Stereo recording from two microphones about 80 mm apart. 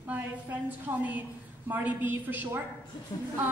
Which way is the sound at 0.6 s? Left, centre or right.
Right.